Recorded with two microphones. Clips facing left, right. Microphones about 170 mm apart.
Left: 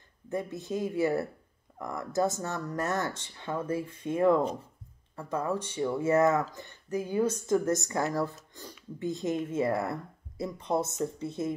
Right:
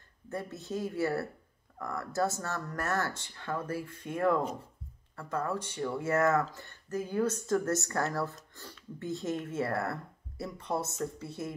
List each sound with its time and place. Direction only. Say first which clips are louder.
0.3 s speech: left 4 dB; 15° left (ahead or behind)